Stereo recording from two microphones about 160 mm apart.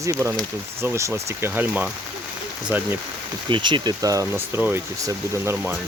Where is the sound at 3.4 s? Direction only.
30° right (ahead or behind); by 5.7 s 15° right (ahead or behind).